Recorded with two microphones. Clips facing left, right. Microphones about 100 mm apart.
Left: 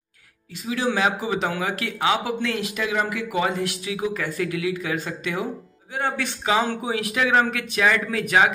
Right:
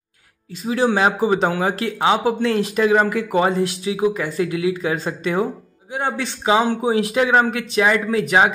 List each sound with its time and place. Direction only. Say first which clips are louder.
0.7 s speech: right 5 dB; 35° right (ahead or behind)
5.9 s a man's voice: right 2 dB; 25° right (ahead or behind)